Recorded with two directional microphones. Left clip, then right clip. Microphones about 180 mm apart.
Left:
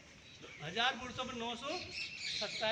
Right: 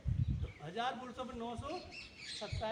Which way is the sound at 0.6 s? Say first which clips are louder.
Left 4 dB; 15° right (ahead or behind).